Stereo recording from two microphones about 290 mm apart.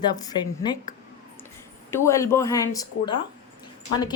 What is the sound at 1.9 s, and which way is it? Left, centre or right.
A woman's voice, centre.